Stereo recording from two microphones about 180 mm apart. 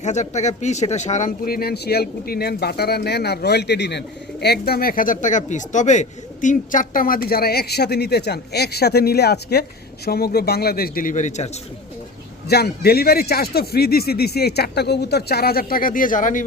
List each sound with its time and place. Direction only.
0.0 s speech: 40° left (ahead or behind)
1.5 s a man's voice: 60° left (ahead or behind); by 11.5 s 40° left (ahead or behind)
12.5 s a man's voice: 60° left (ahead or behind); by 16.4 s 45° left (ahead or behind)